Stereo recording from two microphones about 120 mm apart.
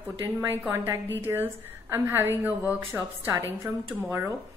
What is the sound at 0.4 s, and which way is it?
A woman's voice, 20° right (ahead or behind).